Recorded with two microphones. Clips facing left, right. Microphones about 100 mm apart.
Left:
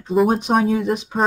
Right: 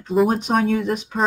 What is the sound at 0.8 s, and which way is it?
Speech, 15° left (ahead or behind).